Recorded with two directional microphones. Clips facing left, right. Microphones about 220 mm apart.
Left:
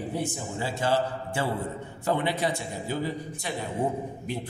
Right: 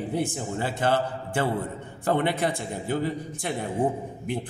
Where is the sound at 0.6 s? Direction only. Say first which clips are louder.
Right 1 dB; 55° right (ahead or behind).